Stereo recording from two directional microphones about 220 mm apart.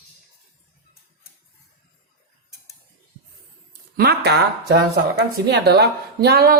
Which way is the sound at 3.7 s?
45° right (ahead or behind).